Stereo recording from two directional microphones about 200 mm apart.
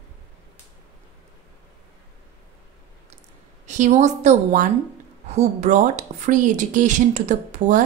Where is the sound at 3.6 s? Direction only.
35° right (ahead or behind).